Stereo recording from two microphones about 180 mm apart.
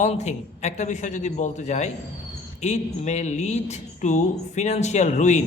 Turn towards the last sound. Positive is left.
turn(degrees=40)  # may be behind; listen again after turning